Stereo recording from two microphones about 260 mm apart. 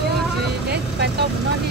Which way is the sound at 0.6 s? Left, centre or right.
Right.